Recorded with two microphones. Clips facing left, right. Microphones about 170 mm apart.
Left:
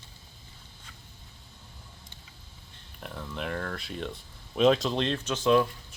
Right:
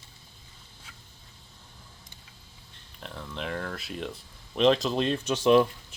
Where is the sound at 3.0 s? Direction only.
5° left (ahead or behind).